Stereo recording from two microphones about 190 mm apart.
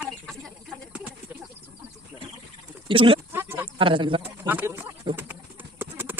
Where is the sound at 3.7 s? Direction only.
25° right (ahead or behind).